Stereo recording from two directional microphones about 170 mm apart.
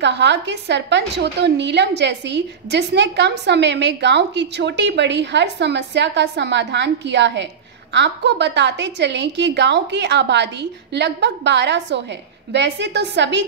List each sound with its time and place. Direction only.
0.0 s a woman's voice: 90° right